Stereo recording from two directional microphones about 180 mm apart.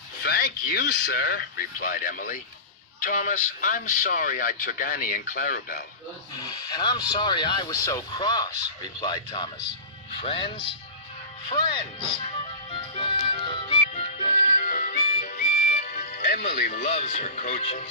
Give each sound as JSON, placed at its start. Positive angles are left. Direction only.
{"t": 0.2, "sound": "speech", "side_deg": 65}
{"t": 6.4, "sound": "speech", "side_deg": 25}
{"t": 13.9, "sound": "music", "side_deg": 45}
{"t": 16.5, "sound": "speech", "side_deg": 50}